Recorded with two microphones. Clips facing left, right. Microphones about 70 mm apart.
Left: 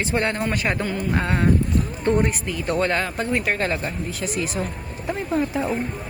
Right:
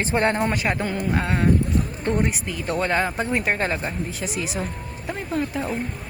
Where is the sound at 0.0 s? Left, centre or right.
Right.